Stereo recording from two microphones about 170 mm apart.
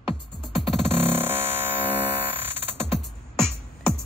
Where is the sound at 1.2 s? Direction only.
10° right (ahead or behind).